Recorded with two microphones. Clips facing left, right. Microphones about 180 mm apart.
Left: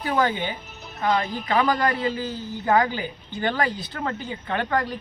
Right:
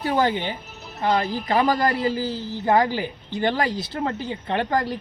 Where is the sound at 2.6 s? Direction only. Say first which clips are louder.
Right 1 dB; 30° right (ahead or behind).